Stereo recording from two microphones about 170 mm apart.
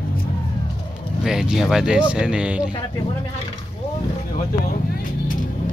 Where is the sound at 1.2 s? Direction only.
5° right (ahead or behind).